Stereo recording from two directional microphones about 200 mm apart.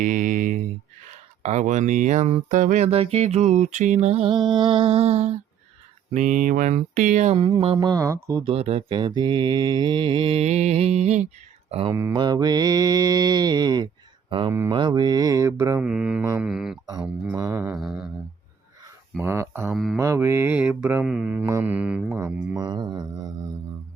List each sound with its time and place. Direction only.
0.0 s speech: 40° right (ahead or behind)
7.3 s mantra: 25° right (ahead or behind)
8.4 s mantra: 30° right (ahead or behind)
11.7 s speech: 30° right (ahead or behind)
11.9 s mantra: 20° right (ahead or behind)
16.4 s speech: centre (ahead or behind)
17.3 s mantra: 15° right (ahead or behind)
17.7 s speech: centre (ahead or behind)
19.2 s mantra: 15° right (ahead or behind)
19.7 s speech: centre (ahead or behind)
20.0 s mantra: 15° right (ahead or behind)